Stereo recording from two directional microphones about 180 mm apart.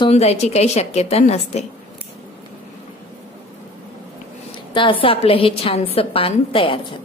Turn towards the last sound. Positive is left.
turn(degrees=30)  # may be behind; listen again after turning